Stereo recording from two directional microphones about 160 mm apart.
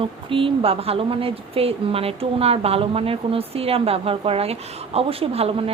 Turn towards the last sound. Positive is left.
turn(degrees=-35)  # may be behind; listen again after turning